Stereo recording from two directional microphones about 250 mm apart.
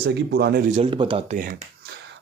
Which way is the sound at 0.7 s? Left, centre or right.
Right.